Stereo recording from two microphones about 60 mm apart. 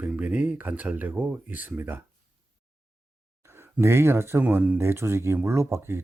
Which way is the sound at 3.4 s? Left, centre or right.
Right.